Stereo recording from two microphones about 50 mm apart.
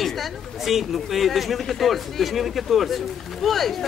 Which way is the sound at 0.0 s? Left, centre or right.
Centre.